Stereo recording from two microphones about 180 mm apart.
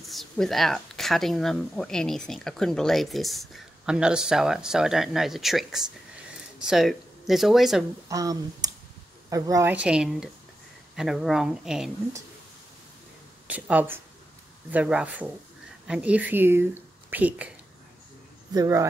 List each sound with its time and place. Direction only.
0.0 s speech: centre (ahead or behind)
8.1 s a woman's voice: 20° right (ahead or behind); by 11.9 s 5° right (ahead or behind)
13.5 s a woman's voice: 10° right (ahead or behind)
18.5 s speech: 20° right (ahead or behind)